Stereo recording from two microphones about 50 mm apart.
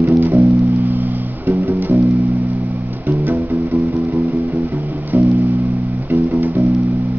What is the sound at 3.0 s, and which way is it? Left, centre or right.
Music, right.